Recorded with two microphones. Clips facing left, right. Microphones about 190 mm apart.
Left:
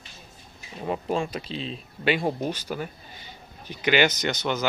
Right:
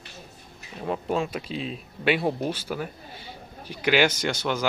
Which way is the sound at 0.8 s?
5° left (ahead or behind).